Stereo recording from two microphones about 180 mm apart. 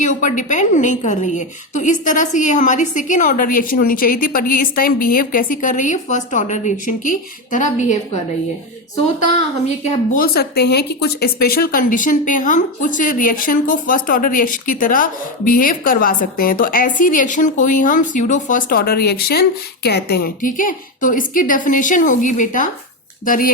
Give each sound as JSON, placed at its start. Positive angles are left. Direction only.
{"t": 0.0, "sound": "a woman's voice", "side_deg": 45}
{"t": 10.2, "sound": "a woman's voice", "side_deg": 60}